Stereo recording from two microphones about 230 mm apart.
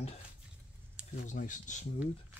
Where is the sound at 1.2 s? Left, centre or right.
Left.